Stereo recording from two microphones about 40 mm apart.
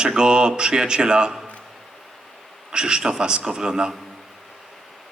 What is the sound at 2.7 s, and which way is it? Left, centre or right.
Speech, right.